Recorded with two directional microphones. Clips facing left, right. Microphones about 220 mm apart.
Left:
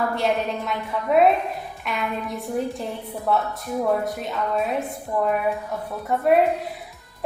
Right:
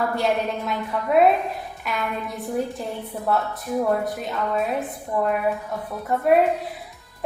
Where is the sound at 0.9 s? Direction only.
Centre (ahead or behind).